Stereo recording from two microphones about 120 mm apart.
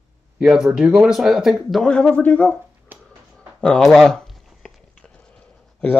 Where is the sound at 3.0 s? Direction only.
10° left (ahead or behind).